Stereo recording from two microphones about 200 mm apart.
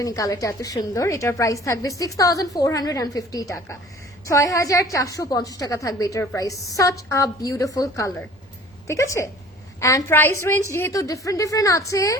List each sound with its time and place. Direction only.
0.0 s a woman's voice: 15° left (ahead or behind)